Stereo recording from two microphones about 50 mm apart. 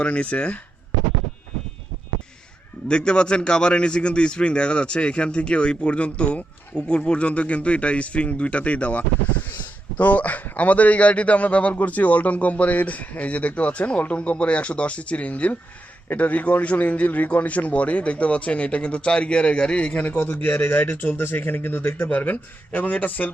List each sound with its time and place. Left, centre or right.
0.0 s a man's voice: left
2.9 s a man's voice: centre; by 23.3 s left